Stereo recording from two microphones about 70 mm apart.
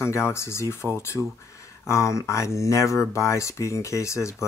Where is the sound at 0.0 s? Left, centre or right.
Left.